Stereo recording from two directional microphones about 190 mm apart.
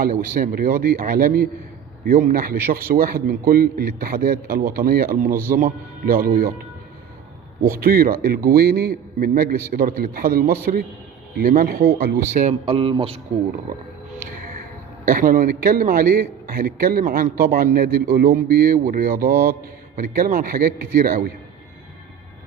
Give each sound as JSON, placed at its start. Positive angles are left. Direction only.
{"t": 0.0, "sound": "a man's voice", "side_deg": -50}
{"t": 7.6, "sound": "a man's voice", "side_deg": -50}
{"t": 15.0, "sound": "a man's voice", "side_deg": -50}